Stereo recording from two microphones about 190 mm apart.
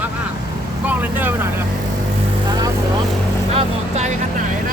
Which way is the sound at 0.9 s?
10° right (ahead or behind).